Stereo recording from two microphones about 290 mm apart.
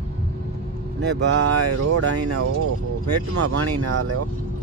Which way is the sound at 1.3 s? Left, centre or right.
Right.